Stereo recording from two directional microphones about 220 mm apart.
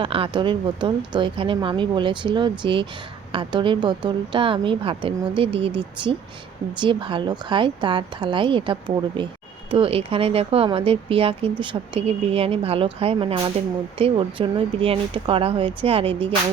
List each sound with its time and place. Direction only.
0.0 s speech: 25° right (ahead or behind)